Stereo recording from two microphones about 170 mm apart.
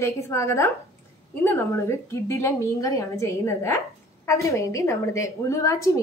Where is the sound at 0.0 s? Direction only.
15° left (ahead or behind).